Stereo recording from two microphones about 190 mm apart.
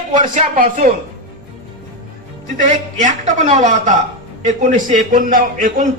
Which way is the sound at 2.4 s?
40° right (ahead or behind).